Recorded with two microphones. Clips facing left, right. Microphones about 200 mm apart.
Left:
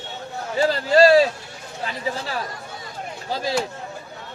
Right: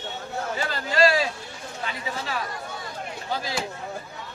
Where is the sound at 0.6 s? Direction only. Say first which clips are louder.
Left 8 dB; 35° left (ahead or behind).